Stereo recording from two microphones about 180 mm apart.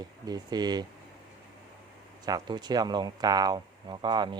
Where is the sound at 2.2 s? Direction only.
20° right (ahead or behind).